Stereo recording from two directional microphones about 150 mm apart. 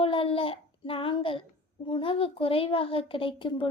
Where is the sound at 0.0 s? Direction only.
35° left (ahead or behind).